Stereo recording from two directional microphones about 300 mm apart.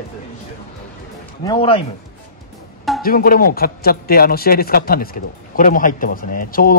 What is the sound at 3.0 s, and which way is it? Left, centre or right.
A man's voice, left.